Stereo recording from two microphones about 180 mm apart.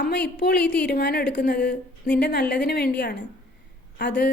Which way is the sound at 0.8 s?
55° left (ahead or behind).